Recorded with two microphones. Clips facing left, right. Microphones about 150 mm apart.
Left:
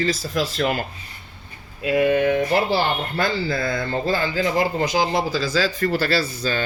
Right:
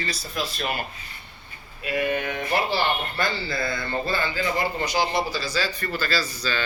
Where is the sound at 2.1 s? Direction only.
90° left.